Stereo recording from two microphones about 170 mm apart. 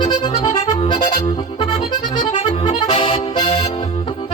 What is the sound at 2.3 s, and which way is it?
Accordion, 30° left (ahead or behind).